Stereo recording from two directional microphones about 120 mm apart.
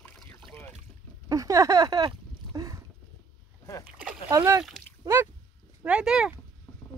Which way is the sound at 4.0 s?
10° right (ahead or behind).